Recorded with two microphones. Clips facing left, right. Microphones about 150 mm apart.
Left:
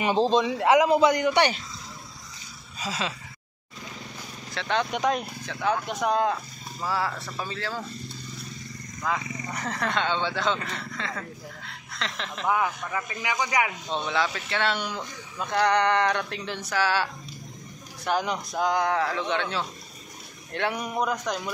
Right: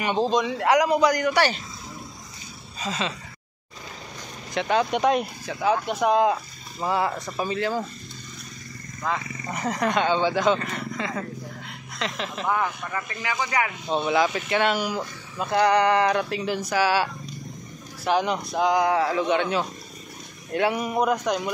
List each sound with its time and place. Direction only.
0.6 s speech: 25° left (ahead or behind)
2.8 s a sound: 5° left (ahead or behind)
4.6 s speech: 5° right (ahead or behind)
6.8 s speech: 20° right (ahead or behind)
9.1 s a sound: 5° left (ahead or behind)
9.5 s speech: 10° right (ahead or behind)
12.4 s speech: 5° left (ahead or behind)
13.8 s speech: 10° right (ahead or behind)